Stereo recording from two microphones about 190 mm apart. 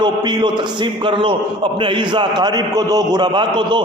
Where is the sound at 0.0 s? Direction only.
25° right (ahead or behind).